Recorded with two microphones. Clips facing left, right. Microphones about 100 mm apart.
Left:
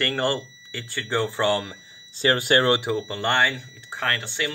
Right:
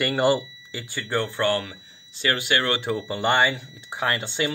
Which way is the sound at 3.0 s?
5° right (ahead or behind).